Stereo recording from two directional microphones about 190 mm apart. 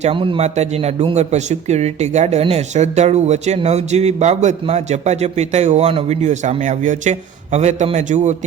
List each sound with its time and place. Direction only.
0.0 s a man's voice: 30° right (ahead or behind)